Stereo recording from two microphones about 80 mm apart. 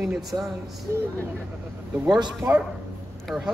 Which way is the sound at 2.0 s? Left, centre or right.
Right.